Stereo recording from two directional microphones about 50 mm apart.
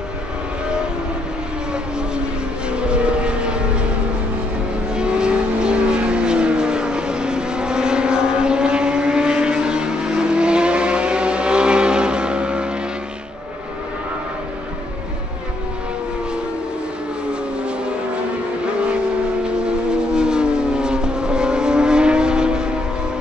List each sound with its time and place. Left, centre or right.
1.7 s vehicle: centre
4.9 s vehicle: centre
17.3 s vehicle: centre
19.4 s vehicle: centre